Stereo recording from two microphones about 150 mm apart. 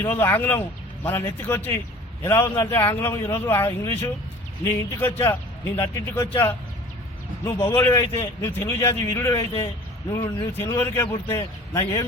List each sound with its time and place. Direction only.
0.0 s a man's voice: 15° left (ahead or behind)